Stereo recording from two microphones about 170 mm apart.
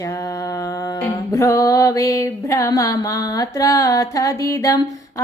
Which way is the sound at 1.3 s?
20° left (ahead or behind).